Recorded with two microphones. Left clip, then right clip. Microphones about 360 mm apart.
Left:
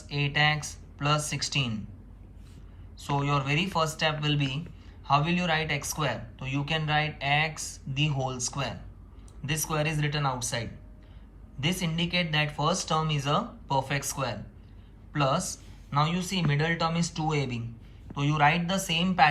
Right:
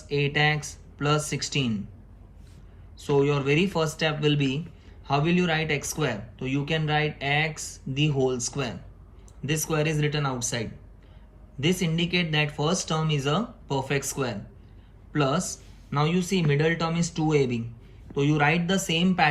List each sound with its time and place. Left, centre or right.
0.1 s speech: centre
3.0 s speech: centre